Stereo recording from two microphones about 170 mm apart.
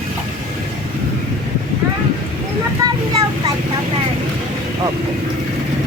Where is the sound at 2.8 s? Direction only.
20° right (ahead or behind).